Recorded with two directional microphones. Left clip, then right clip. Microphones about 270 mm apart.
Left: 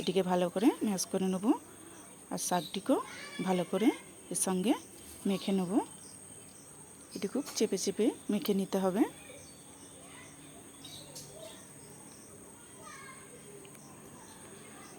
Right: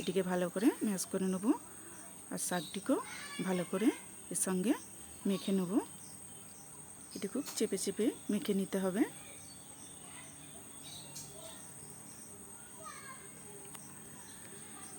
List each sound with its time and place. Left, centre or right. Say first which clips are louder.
0.0 s speech: left 4 dB; centre
7.2 s speech: left 4 dB; centre